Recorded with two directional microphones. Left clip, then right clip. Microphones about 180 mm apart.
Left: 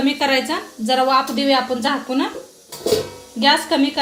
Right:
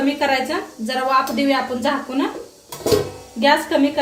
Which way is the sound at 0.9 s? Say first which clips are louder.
Left 2 dB; 45° left (ahead or behind).